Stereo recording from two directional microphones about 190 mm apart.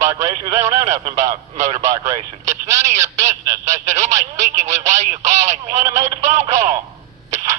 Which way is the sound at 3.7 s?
40° right (ahead or behind).